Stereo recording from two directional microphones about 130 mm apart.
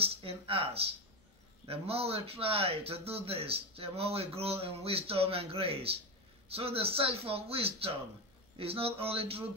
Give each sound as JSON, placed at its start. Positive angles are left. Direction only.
{"t": 0.0, "sound": "speech", "side_deg": -45}